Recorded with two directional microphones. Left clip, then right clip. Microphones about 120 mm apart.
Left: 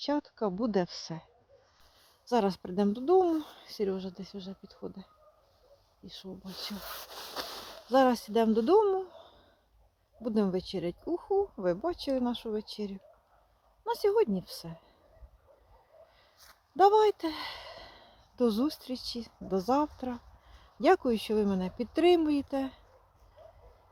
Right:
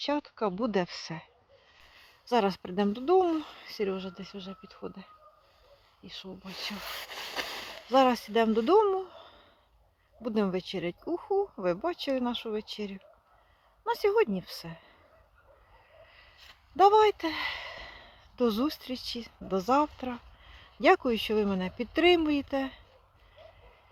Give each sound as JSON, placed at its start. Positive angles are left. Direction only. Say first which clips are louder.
{"t": 0.0, "sound": "speech", "louder": "right 1 dB", "side_deg": 0}
{"t": 2.2, "sound": "speech", "louder": "right 2 dB", "side_deg": 35}
{"t": 7.1, "sound": "a sound", "louder": "right 4 dB", "side_deg": -20}
{"t": 7.9, "sound": "speech", "louder": "right 1 dB", "side_deg": 35}
{"t": 11.3, "sound": "speech", "louder": "even", "side_deg": 0}
{"t": 11.6, "sound": "speech", "louder": "right 1 dB", "side_deg": 35}
{"t": 16.7, "sound": "speech", "louder": "right 2 dB", "side_deg": 35}